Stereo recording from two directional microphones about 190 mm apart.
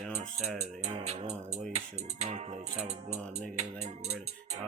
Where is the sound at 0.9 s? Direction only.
35° right (ahead or behind).